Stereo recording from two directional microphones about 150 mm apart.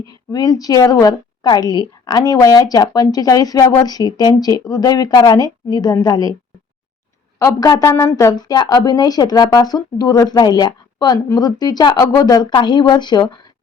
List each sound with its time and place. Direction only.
0.0 s speech: 25° left (ahead or behind)
7.3 s speech: 20° left (ahead or behind)